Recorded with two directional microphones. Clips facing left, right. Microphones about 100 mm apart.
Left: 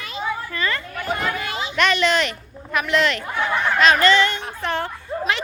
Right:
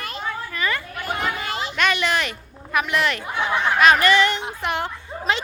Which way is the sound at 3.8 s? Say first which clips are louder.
Even; 15° right (ahead or behind).